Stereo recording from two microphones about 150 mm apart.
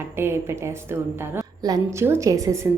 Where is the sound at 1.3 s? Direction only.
20° right (ahead or behind).